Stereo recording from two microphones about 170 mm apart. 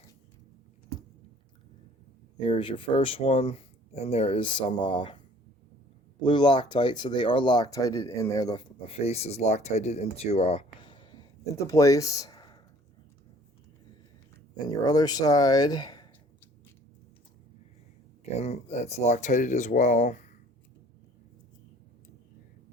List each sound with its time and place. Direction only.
2.4 s speech: 30° left (ahead or behind)
8.9 s speech: 35° left (ahead or behind)
14.8 s speech: 20° left (ahead or behind)
18.3 s speech: 40° left (ahead or behind)